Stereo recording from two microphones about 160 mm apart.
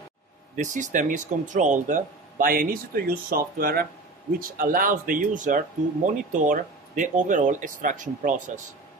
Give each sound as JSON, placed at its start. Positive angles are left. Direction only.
{"t": 0.6, "sound": "speech", "side_deg": -50}